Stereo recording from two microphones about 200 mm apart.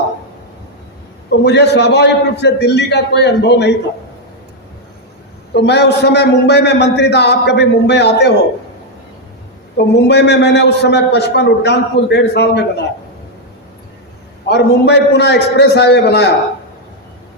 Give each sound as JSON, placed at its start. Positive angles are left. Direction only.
{"t": 1.3, "sound": "a man's voice", "side_deg": 55}
{"t": 5.5, "sound": "a man's voice", "side_deg": 55}
{"t": 9.7, "sound": "a man's voice", "side_deg": 55}
{"t": 14.4, "sound": "a man's voice", "side_deg": 60}